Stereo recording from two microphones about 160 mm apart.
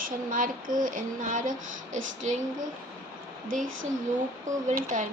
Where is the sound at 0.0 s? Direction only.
55° right (ahead or behind).